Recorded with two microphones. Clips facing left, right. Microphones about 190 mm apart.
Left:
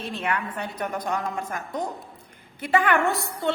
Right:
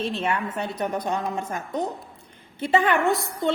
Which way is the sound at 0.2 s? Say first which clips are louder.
Right 2 dB; 25° right (ahead or behind).